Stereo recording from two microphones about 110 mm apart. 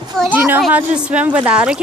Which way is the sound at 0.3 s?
20° right (ahead or behind).